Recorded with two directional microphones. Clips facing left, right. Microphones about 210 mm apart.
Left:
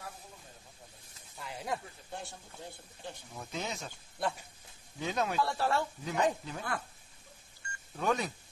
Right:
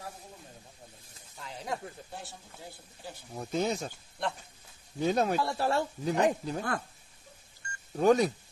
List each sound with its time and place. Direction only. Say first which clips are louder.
1.4 s speech: right 1 dB; centre (ahead or behind)
3.3 s speech: right 10 dB; 40° right (ahead or behind)
5.0 s speech: right 6 dB; 40° right (ahead or behind)
5.4 s speech: right 1 dB; 15° right (ahead or behind)
5.7 s speech: right 4 dB; 35° right (ahead or behind)
7.9 s speech: right 9 dB; 35° right (ahead or behind)